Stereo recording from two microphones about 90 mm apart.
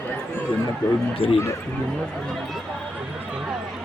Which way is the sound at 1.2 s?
90° left.